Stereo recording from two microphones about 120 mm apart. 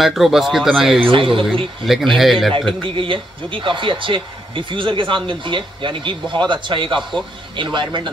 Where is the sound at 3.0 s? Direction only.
45° right (ahead or behind).